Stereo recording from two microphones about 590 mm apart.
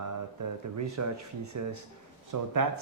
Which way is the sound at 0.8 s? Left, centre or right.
Right.